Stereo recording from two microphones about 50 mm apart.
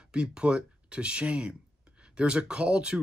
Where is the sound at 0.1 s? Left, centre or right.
Right.